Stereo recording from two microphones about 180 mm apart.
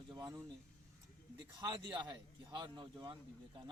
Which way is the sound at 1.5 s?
20° right (ahead or behind).